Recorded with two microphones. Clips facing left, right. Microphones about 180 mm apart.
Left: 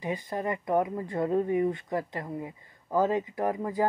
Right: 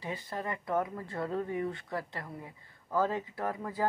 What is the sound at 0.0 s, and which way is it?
Speech, 15° left (ahead or behind).